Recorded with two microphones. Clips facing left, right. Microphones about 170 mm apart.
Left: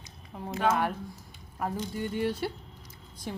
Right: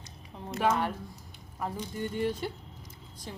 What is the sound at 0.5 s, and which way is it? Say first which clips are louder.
Speech: left 1 dB; centre (ahead or behind).